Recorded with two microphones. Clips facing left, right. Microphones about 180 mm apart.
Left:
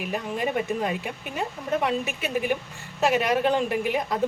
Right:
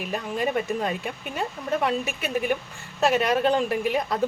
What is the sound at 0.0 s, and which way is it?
Speech, 20° left (ahead or behind).